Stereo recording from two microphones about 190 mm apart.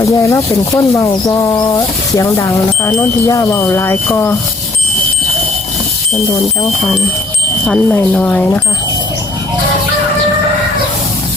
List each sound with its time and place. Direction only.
0.0 s speech: 15° left (ahead or behind)
7.7 s speech: 10° left (ahead or behind)